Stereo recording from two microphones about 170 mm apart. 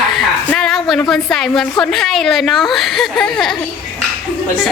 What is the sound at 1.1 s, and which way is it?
A woman's voice, centre (ahead or behind).